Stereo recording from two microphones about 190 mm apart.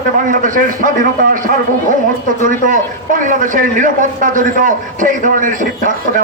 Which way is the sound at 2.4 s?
45° right (ahead or behind).